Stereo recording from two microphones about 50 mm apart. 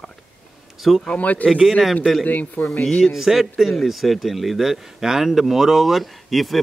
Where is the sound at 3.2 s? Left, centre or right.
Centre.